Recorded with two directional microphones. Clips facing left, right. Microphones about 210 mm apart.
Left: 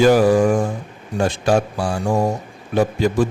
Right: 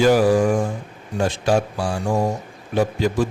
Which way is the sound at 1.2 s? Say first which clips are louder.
Left 2 dB; 50° left (ahead or behind).